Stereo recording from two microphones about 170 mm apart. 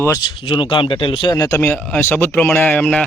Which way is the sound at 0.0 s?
15° left (ahead or behind).